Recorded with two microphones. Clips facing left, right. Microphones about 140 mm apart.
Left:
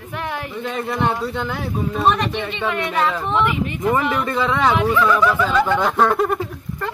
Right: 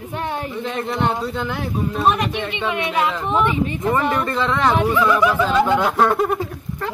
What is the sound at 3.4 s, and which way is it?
Speech, 30° right (ahead or behind).